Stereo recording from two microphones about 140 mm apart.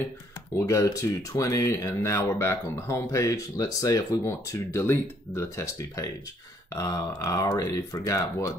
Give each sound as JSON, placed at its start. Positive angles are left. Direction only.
{"t": 0.6, "sound": "speech", "side_deg": 20}